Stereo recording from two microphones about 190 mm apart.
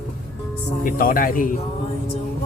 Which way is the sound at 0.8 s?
45° left (ahead or behind).